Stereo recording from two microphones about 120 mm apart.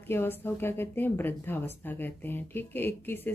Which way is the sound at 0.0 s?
20° left (ahead or behind).